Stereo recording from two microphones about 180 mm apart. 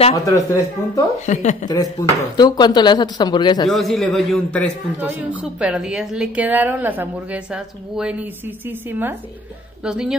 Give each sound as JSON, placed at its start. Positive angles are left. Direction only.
{"t": 0.1, "sound": "speech", "side_deg": 20}
{"t": 1.2, "sound": "a woman's voice", "side_deg": 40}
{"t": 1.7, "sound": "speech", "side_deg": 20}
{"t": 3.6, "sound": "a man's voice", "side_deg": 0}
{"t": 4.9, "sound": "a woman's voice", "side_deg": -10}